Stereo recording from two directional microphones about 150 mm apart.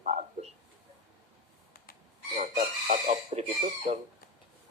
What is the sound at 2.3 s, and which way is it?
Speech, 55° right (ahead or behind).